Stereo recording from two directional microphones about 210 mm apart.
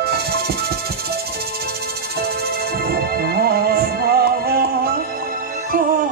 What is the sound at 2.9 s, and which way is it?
Music, 45° right (ahead or behind).